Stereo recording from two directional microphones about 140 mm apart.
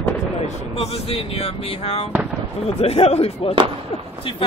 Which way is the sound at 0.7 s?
45° left (ahead or behind).